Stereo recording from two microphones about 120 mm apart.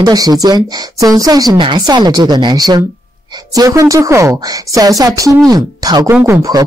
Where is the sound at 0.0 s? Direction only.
35° right (ahead or behind).